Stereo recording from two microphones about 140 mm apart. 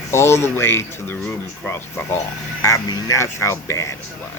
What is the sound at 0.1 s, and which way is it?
Speech, 20° left (ahead or behind).